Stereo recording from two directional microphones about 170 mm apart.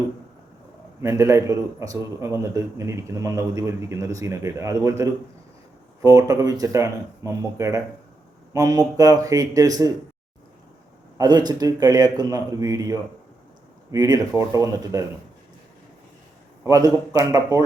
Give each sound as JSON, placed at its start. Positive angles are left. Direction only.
{"t": 1.0, "sound": "a man's voice", "side_deg": -15}
{"t": 11.2, "sound": "speech", "side_deg": -25}
{"t": 16.6, "sound": "speech", "side_deg": -20}